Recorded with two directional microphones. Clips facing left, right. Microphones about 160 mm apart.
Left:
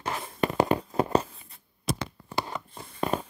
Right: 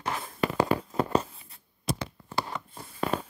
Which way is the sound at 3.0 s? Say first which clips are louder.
Left 1 dB; 15° left (ahead or behind).